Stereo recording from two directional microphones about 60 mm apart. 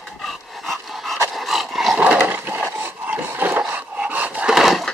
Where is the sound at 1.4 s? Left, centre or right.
Centre.